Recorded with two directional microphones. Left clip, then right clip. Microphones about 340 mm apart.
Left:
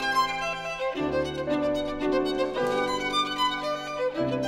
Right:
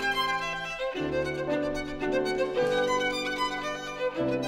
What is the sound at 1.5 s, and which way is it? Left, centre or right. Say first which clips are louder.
Music: left 4 dB; centre.